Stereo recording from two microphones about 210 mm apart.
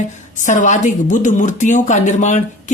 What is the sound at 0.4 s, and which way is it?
A woman's voice, 35° left (ahead or behind).